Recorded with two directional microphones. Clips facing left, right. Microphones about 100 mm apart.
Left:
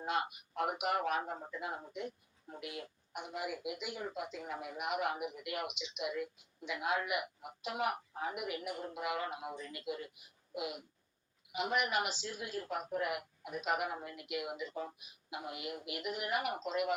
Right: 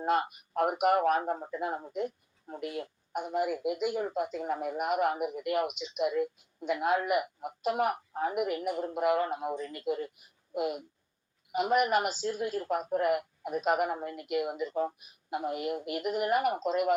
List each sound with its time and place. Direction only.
0.0 s speech: 45° right (ahead or behind)